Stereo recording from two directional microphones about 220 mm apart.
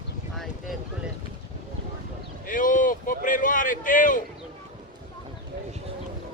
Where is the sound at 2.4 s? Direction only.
35° left (ahead or behind).